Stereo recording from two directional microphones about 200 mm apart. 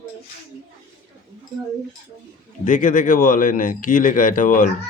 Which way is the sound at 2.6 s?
40° left (ahead or behind).